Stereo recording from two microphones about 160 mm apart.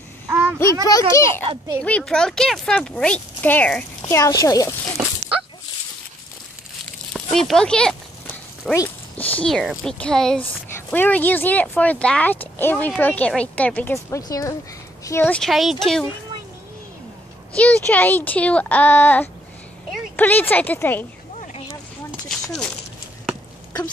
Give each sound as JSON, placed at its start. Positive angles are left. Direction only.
{"t": 0.3, "sound": "a sound", "side_deg": -10}
{"t": 0.8, "sound": "a child's voice", "side_deg": 20}
{"t": 1.8, "sound": "speech", "side_deg": 5}
{"t": 4.2, "sound": "a child's voice", "side_deg": 20}
{"t": 7.2, "sound": "speech", "side_deg": 0}
{"t": 8.7, "sound": "a sound", "side_deg": 15}
{"t": 9.3, "sound": "speech", "side_deg": 5}
{"t": 17.6, "sound": "speech", "side_deg": 10}
{"t": 22.3, "sound": "a sound", "side_deg": 5}